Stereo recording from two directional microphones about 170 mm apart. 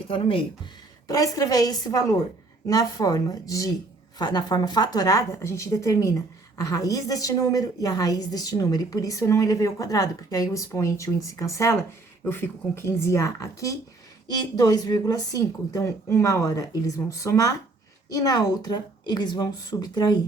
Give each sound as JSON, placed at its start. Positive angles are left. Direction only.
{"t": 0.1, "sound": "speech", "side_deg": 30}
{"t": 1.0, "sound": "speech", "side_deg": 20}